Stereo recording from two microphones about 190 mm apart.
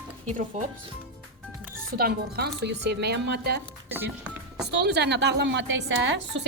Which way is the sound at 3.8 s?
10° right (ahead or behind).